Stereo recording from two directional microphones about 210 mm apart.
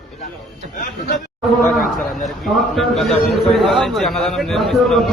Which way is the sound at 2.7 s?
Centre (ahead or behind).